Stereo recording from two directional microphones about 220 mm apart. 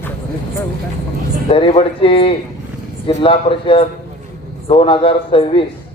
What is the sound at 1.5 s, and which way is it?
A man's voice, 25° left (ahead or behind).